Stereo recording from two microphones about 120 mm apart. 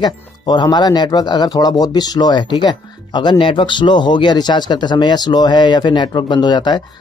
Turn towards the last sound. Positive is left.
turn(degrees=40)  # may be behind; listen again after turning